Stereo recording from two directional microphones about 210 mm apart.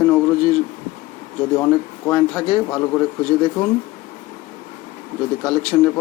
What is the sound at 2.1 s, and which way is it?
Speech, 5° left (ahead or behind).